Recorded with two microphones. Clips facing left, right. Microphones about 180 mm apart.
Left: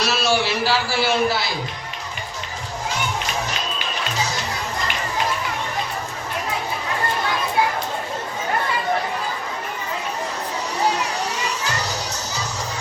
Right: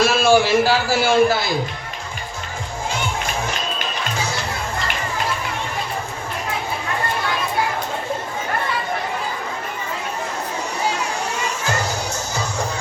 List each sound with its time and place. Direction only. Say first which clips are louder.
0.0 s a man's voice: right 6 dB; 50° right (ahead or behind)
11.8 s music: right 3 dB; 50° right (ahead or behind)